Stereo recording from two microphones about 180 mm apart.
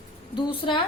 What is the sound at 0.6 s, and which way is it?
Speech, 30° left (ahead or behind).